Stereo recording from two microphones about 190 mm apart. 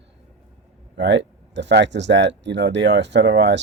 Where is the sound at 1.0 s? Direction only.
70° right (ahead or behind).